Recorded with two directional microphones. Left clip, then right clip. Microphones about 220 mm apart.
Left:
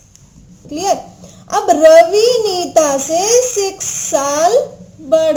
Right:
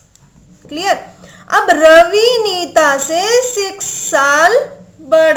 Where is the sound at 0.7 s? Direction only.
5° right (ahead or behind).